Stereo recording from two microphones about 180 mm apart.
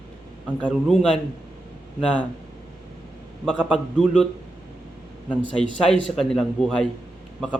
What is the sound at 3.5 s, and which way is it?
Speech, centre (ahead or behind).